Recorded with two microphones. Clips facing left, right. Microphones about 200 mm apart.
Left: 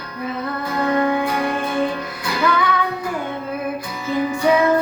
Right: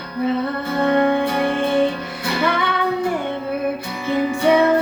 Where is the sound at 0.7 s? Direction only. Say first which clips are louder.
Right 2 dB; 30° right (ahead or behind).